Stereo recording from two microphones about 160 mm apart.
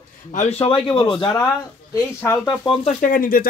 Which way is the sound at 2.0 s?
15° left (ahead or behind).